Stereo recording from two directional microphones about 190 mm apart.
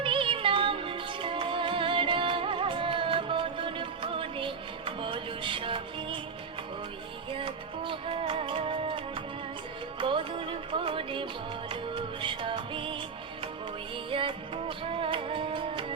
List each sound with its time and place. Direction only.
0.0 s music: 25° right (ahead or behind)
7.3 s music: 25° right (ahead or behind)